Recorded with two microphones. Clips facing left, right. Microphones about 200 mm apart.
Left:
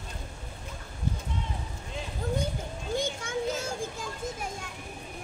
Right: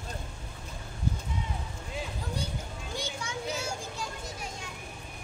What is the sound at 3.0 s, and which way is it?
Children playing, 50° left (ahead or behind).